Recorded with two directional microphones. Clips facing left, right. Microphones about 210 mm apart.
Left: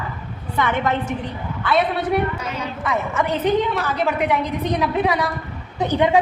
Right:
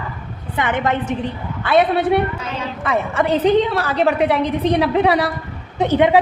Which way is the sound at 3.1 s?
30° right (ahead or behind).